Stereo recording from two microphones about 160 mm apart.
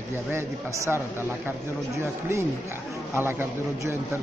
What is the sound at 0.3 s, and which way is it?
Speech, 15° right (ahead or behind).